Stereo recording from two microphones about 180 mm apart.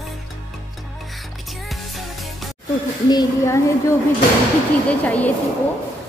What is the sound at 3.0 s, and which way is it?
Speech, 20° left (ahead or behind).